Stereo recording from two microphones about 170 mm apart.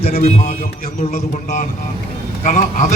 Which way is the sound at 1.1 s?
50° left (ahead or behind).